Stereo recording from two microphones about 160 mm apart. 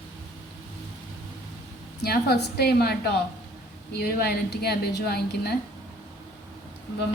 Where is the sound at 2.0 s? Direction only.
80° left.